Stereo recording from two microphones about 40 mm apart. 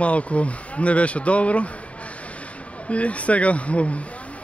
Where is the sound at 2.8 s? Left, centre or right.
Left.